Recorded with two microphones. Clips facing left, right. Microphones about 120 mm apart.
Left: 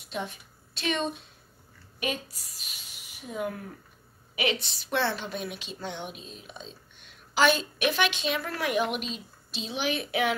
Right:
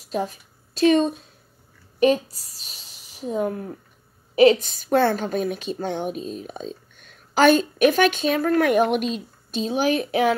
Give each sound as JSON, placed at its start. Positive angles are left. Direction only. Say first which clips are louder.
{"t": 0.0, "sound": "a woman's voice", "louder": "right 8 dB", "side_deg": -35}